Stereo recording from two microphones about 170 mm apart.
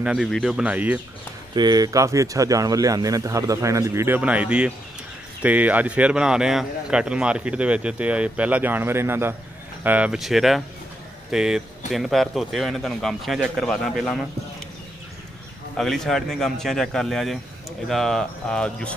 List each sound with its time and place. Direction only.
0.0 s speech: 5° right (ahead or behind)
1.5 s a man's voice: 25° right (ahead or behind); by 14.2 s centre (ahead or behind)
15.7 s speech: centre (ahead or behind)